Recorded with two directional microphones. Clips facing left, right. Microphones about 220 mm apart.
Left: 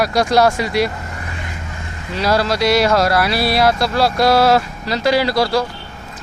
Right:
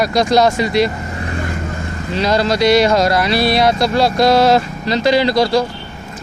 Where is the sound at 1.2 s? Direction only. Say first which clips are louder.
Right 8 dB; 45° right (ahead or behind).